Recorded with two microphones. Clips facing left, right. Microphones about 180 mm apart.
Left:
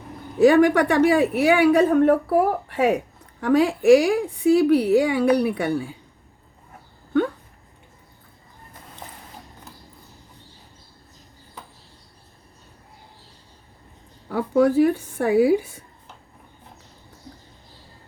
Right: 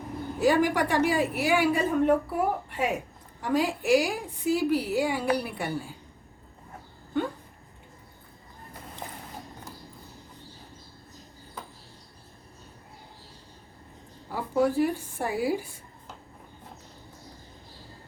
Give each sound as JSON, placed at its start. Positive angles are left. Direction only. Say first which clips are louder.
{"t": 0.4, "sound": "a woman's voice", "louder": "left 8 dB", "side_deg": 65}
{"t": 14.3, "sound": "a woman's voice", "louder": "left 7 dB", "side_deg": 65}